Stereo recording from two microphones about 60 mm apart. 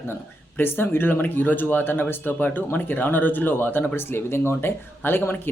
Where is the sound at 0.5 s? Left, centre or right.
Left.